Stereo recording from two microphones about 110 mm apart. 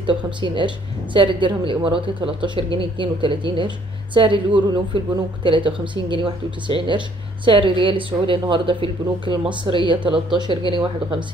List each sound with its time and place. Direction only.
0.0 s a woman's voice: 45° right (ahead or behind)